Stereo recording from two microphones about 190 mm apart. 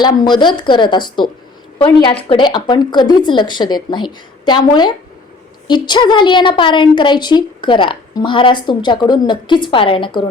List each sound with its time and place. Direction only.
0.0 s a woman's voice: 25° left (ahead or behind)